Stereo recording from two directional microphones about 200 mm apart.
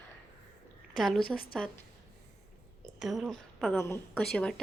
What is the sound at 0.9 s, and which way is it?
Speech, centre (ahead or behind).